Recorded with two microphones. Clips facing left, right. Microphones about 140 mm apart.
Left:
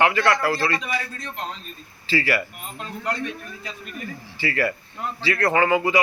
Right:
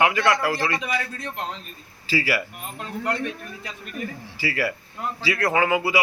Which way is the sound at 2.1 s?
10° right (ahead or behind).